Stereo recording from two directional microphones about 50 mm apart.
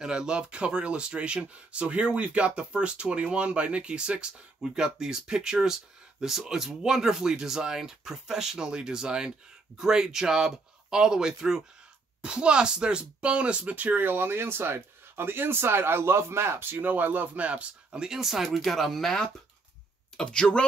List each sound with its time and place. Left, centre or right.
0.0 s speech: centre; by 16.7 s right
16.7 s speech: right; by 19.2 s centre
20.2 s speech: centre